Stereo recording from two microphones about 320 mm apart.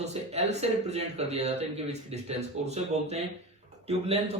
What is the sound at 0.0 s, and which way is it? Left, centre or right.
Speech, centre.